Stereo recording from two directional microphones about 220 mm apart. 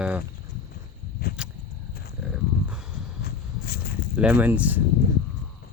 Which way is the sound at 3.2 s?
45° left (ahead or behind).